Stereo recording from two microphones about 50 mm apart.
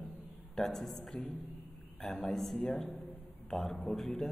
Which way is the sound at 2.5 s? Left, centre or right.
Centre.